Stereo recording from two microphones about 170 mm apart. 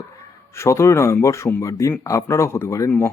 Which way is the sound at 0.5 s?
15° left (ahead or behind).